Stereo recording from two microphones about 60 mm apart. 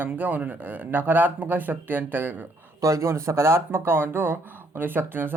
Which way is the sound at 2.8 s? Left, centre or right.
Right.